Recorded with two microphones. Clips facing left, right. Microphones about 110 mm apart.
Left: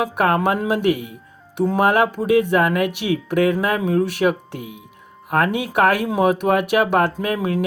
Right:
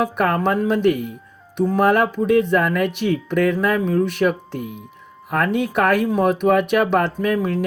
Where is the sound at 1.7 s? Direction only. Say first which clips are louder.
Even; 60° left (ahead or behind).